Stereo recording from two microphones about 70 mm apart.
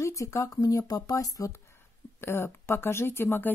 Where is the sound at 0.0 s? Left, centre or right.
Left.